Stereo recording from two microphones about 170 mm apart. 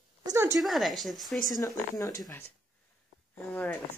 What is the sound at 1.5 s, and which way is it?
Speech, 20° left (ahead or behind).